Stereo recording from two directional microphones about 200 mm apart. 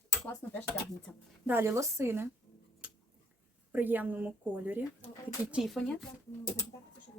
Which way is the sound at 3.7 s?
10° right (ahead or behind).